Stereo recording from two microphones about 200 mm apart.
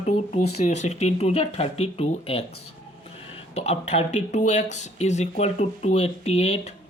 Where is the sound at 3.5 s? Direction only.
30° left (ahead or behind).